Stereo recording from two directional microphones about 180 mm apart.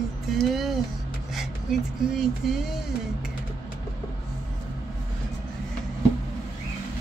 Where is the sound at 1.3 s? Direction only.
Centre (ahead or behind).